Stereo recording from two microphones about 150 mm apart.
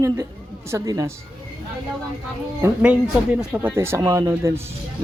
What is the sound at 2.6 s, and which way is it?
A man's voice, 10° right (ahead or behind).